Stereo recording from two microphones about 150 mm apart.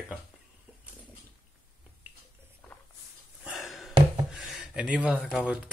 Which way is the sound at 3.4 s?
Centre (ahead or behind).